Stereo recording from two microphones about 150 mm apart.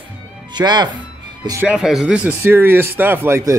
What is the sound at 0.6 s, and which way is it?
Speech, 30° right (ahead or behind).